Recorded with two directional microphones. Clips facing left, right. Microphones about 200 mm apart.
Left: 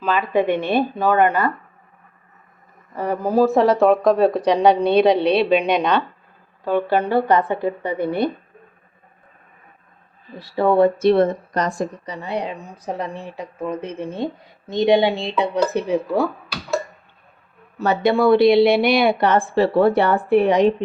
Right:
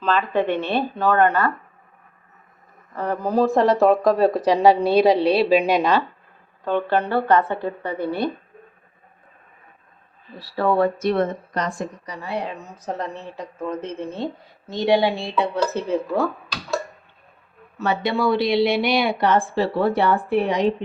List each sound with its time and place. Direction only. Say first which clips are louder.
0.0 s speech: left 2 dB; 10° left (ahead or behind)
2.9 s speech: left 2 dB; 10° left (ahead or behind)
6.7 s speech: left 2 dB; 10° left (ahead or behind)
10.5 s speech: left 4 dB; 20° left (ahead or behind); by 11.9 s 40° left (ahead or behind)
12.0 s speech: left 2 dB; 20° left (ahead or behind)
17.7 s a woman's voice: left 5 dB; 45° left (ahead or behind)